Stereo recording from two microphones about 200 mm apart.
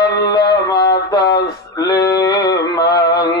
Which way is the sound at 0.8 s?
55° left (ahead or behind).